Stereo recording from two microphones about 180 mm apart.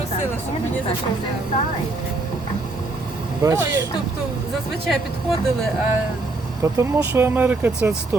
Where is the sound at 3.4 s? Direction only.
20° right (ahead or behind).